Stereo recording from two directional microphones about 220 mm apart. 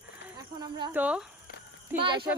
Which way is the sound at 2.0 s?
20° right (ahead or behind).